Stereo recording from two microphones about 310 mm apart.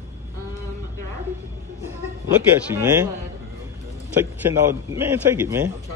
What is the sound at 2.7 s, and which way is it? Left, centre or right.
Speech, centre.